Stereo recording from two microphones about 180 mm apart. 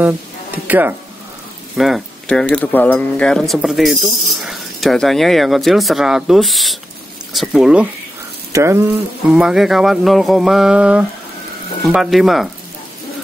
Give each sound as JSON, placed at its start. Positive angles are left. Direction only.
{"t": 0.7, "sound": "speech", "side_deg": -10}
{"t": 8.5, "sound": "speech", "side_deg": -15}
{"t": 9.3, "sound": "speech", "side_deg": -5}